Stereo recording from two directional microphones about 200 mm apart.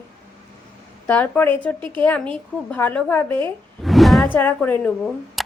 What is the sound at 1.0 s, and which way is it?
A woman's voice, 10° left (ahead or behind).